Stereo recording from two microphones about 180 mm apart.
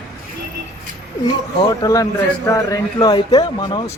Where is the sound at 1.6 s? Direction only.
20° left (ahead or behind).